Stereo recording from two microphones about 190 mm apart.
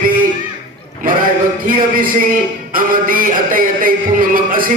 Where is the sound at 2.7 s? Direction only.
45° right (ahead or behind).